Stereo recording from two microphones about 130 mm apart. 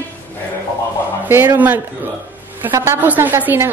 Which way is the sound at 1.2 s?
15° right (ahead or behind).